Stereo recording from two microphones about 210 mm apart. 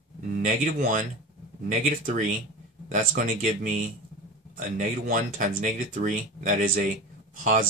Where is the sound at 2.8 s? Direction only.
35° right (ahead or behind).